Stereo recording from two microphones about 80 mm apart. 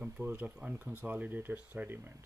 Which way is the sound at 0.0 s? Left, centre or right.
Right.